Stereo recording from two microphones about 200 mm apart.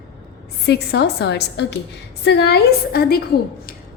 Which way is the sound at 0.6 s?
55° left (ahead or behind).